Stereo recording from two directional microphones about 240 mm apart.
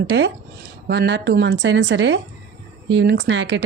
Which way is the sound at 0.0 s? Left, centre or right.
Right.